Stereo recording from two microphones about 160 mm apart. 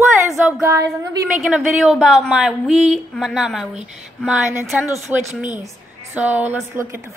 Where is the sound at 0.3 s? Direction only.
10° right (ahead or behind).